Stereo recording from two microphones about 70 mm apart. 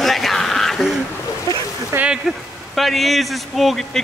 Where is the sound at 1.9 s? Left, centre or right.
Right.